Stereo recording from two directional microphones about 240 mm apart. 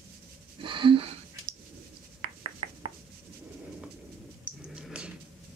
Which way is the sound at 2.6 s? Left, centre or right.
Right.